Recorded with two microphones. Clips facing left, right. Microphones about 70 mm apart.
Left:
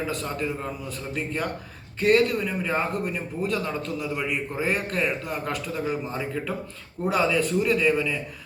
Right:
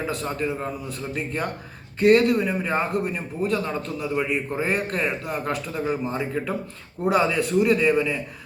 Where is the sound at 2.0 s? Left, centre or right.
Centre.